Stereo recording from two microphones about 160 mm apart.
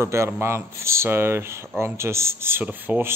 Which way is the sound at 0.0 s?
15° right (ahead or behind).